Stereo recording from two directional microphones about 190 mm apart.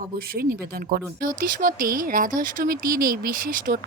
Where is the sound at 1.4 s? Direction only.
45° right (ahead or behind).